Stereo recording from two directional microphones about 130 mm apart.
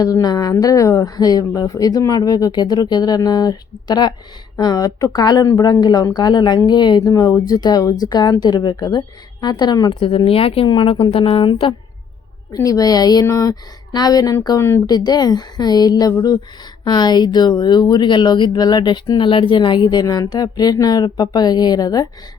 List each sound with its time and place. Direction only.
0.0 s speech: 30° left (ahead or behind); by 11.7 s 45° left (ahead or behind)
12.5 s speech: 25° left (ahead or behind)